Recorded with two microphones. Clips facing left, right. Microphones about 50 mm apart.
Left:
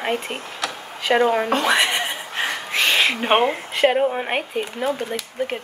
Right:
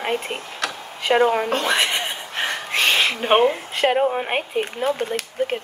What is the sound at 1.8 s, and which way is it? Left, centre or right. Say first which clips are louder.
Speech: left 1 dB; left.